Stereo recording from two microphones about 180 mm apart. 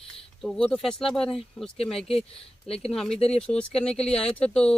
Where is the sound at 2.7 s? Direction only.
35° left (ahead or behind).